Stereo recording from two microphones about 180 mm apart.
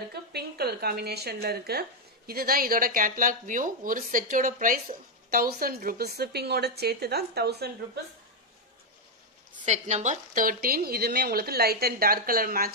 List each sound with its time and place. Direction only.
0.1 s speech: 65° right (ahead or behind)
9.7 s speech: 40° right (ahead or behind)